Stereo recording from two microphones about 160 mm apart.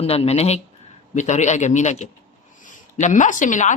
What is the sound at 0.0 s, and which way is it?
A woman's voice, 40° left (ahead or behind).